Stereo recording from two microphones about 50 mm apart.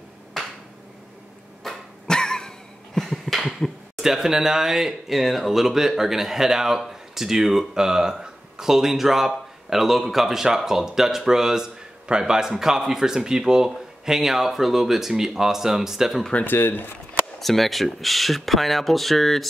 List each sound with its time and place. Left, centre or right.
2.0 s a sound: centre
4.0 s speech: centre
16.4 s speech: left
17.4 s speech: centre